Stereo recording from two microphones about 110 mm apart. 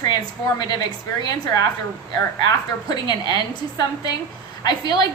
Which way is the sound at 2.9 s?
40° left (ahead or behind).